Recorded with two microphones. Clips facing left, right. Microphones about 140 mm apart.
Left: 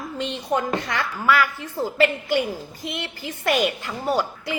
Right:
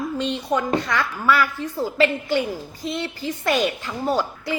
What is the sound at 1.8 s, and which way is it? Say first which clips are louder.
A woman's voice: even; 20° left (ahead or behind).